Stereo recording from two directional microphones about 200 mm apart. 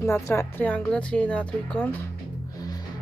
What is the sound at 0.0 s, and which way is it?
Speech, 10° left (ahead or behind).